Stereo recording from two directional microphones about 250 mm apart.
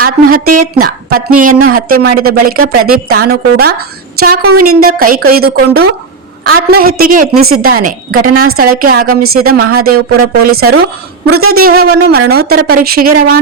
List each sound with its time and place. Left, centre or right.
0.0 s a woman's voice: right
8.3 s a woman's voice: right
8.5 s a woman's voice: right
11.3 s a woman's voice: right
11.5 s a woman's voice: right